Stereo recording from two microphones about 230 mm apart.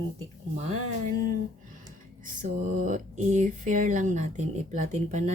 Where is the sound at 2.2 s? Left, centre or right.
Right.